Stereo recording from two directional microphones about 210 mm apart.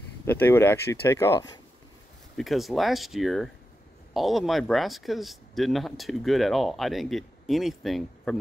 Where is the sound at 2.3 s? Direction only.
Centre (ahead or behind).